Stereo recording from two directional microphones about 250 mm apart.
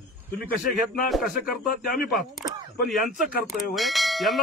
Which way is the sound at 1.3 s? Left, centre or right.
Left.